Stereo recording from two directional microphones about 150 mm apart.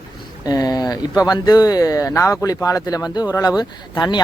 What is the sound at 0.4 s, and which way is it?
Speech, 25° left (ahead or behind).